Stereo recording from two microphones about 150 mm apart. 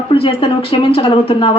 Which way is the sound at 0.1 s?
35° left (ahead or behind).